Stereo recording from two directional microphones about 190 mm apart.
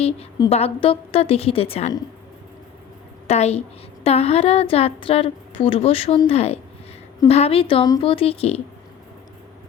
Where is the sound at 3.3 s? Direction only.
35° left (ahead or behind).